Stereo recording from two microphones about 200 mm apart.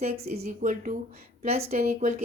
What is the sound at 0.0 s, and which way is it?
Speech, 40° right (ahead or behind).